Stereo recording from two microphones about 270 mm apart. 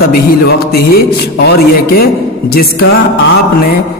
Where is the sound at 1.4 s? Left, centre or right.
Left.